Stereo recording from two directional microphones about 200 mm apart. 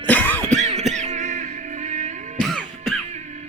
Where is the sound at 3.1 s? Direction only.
35° right (ahead or behind).